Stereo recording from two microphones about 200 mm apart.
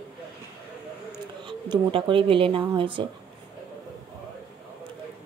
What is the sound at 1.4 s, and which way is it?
A woman's voice, 25° right (ahead or behind).